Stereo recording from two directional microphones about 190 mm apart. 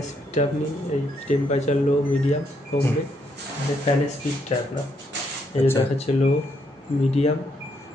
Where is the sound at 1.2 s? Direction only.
35° left (ahead or behind).